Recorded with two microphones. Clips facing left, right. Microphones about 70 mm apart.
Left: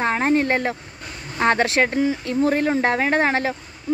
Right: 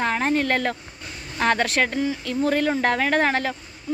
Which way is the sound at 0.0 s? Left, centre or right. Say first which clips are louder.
Left 3 dB; left.